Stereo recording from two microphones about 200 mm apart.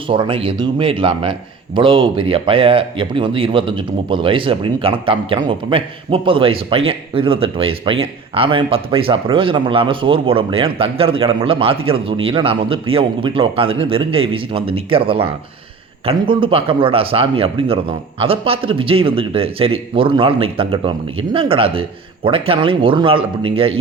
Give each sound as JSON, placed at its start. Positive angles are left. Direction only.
{"t": 0.1, "sound": "speech", "side_deg": -25}